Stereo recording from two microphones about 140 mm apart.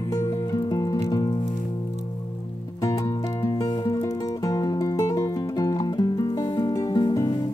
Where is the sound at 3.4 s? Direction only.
25° left (ahead or behind).